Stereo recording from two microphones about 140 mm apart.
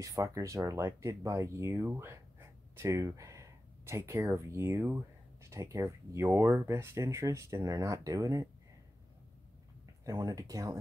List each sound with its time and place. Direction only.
0.0 s speech: 25° right (ahead or behind)
10.0 s speech: 25° right (ahead or behind)